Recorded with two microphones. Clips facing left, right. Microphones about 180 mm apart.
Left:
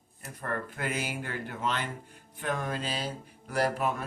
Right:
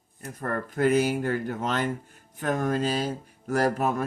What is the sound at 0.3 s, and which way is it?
Speech, 40° right (ahead or behind).